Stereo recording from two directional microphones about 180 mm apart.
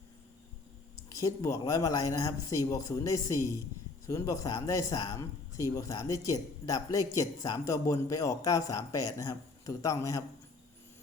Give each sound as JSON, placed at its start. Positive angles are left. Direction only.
{"t": 1.1, "sound": "a man's voice", "side_deg": 15}